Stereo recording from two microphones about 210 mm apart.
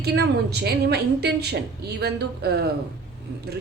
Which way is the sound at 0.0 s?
50° right (ahead or behind).